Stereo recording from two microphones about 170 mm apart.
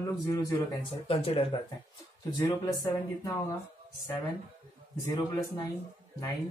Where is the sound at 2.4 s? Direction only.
20° left (ahead or behind).